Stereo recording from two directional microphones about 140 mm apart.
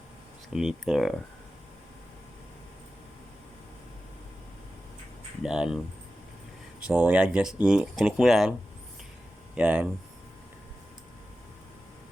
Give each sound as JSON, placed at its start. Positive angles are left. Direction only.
{"t": 0.5, "sound": "speech", "side_deg": -5}
{"t": 5.4, "sound": "speech", "side_deg": -5}
{"t": 6.8, "sound": "speech", "side_deg": -10}
{"t": 9.6, "sound": "speech", "side_deg": -5}